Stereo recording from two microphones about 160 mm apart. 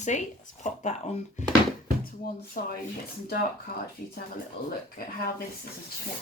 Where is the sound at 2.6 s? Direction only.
65° left (ahead or behind).